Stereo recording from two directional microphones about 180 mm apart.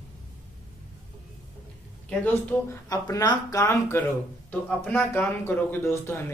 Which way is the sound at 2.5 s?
15° left (ahead or behind).